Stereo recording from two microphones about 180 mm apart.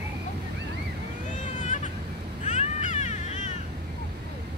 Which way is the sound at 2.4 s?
40° left (ahead or behind).